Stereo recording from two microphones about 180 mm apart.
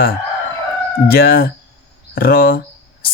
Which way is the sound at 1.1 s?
60° left (ahead or behind).